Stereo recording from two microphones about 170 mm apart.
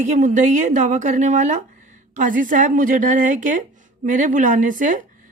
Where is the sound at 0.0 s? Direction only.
45° right (ahead or behind).